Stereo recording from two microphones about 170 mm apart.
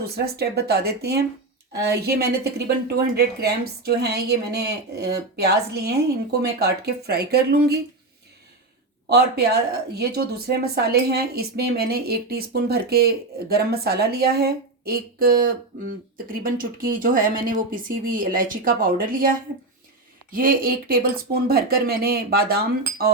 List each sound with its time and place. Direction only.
0.0 s a woman's voice: 70° right (ahead or behind)
9.0 s a woman's voice: 70° right (ahead or behind)